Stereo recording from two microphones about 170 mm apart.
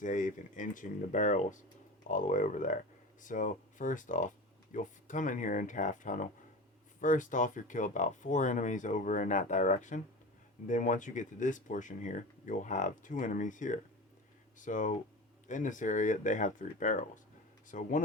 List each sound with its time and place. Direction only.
0.0 s speech: 50° left (ahead or behind)